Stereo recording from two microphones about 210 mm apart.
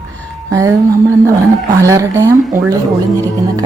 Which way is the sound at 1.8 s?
15° right (ahead or behind).